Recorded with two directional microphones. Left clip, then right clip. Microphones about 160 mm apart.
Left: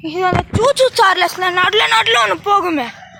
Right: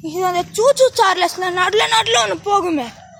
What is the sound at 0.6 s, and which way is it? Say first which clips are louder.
Speech: even; 15° right (ahead or behind).